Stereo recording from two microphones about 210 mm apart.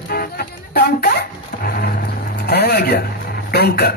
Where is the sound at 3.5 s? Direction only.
50° left (ahead or behind).